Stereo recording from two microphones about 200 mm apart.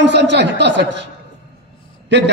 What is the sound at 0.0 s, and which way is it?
A man's voice, 60° right (ahead or behind).